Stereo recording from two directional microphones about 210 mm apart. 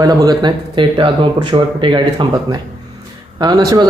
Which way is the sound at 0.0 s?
20° right (ahead or behind).